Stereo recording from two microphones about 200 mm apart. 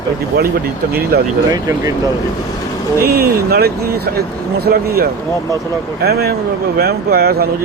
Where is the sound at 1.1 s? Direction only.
50° right (ahead or behind).